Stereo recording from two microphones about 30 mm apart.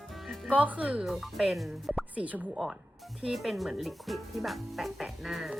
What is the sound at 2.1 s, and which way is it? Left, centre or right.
Speech, right.